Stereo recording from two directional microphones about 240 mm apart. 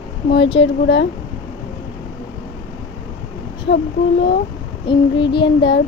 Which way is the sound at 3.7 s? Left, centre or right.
Left.